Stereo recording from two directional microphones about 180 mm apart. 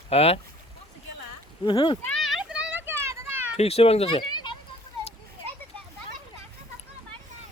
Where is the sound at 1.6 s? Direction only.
25° left (ahead or behind).